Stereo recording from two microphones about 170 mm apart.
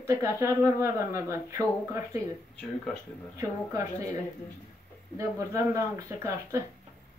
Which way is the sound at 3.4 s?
20° right (ahead or behind).